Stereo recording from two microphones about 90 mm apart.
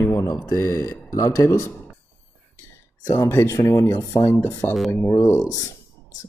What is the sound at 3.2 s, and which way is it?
Speech, 30° left (ahead or behind).